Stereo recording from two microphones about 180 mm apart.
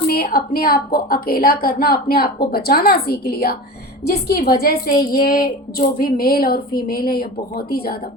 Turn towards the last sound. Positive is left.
turn(degrees=55)  # may be behind; listen again after turning